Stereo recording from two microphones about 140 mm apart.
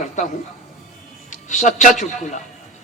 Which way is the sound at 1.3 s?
60° left (ahead or behind).